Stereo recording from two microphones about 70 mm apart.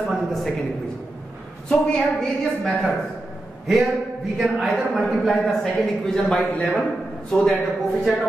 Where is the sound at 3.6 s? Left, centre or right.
Centre.